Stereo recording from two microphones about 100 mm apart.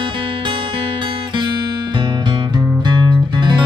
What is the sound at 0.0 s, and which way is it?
Music, 55° right (ahead or behind).